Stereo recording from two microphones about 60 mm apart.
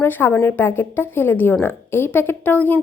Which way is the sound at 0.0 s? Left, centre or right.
Left.